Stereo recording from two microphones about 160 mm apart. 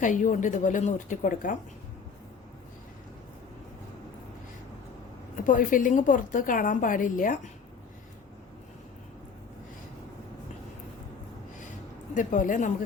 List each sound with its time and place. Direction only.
0.0 s a woman's voice: 55° left (ahead or behind)
5.5 s a woman's voice: 55° left (ahead or behind)
12.1 s a woman's voice: 55° left (ahead or behind)